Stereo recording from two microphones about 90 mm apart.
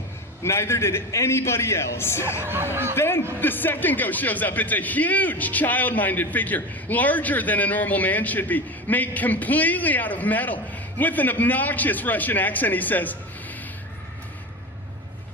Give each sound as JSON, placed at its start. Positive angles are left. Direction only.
{"t": 0.4, "sound": "speech", "side_deg": 30}